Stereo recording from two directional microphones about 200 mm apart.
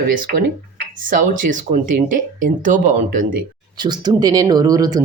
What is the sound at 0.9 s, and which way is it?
Speech, 40° right (ahead or behind).